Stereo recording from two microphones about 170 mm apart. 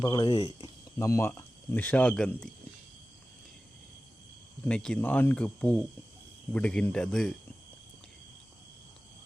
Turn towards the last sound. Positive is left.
turn(degrees=5)  # may be behind; listen again after turning